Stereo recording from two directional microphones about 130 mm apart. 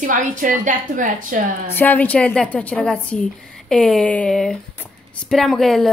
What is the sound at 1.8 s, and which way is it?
A woman's voice, 10° left (ahead or behind).